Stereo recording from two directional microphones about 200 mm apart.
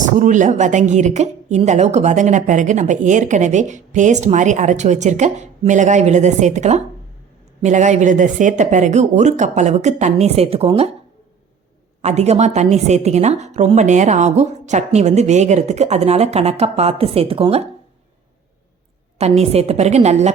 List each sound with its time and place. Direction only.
0.2 s a woman's voice: 40° right (ahead or behind)
12.0 s a woman's voice: 35° right (ahead or behind)
19.2 s a woman's voice: 30° right (ahead or behind)